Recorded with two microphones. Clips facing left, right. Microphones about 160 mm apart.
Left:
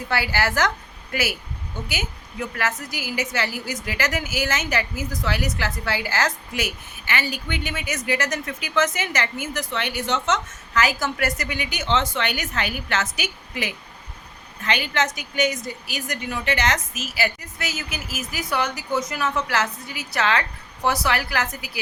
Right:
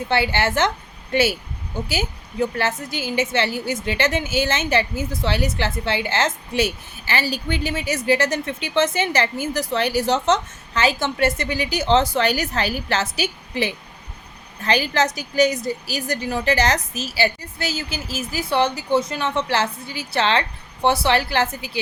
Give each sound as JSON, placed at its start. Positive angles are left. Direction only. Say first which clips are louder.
{"t": 0.1, "sound": "a woman's voice", "louder": "right 3 dB", "side_deg": -25}